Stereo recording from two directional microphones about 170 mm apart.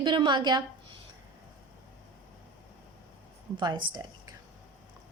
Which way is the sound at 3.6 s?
25° right (ahead or behind).